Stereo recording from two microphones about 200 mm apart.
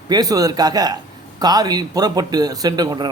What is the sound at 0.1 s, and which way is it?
A man's voice, 20° right (ahead or behind).